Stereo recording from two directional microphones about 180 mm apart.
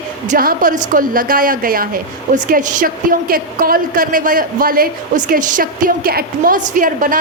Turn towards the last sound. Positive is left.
turn(degrees=-50)  # may be behind; listen again after turning